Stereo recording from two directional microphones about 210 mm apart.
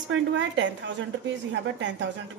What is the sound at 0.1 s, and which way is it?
A woman's voice, 65° right (ahead or behind).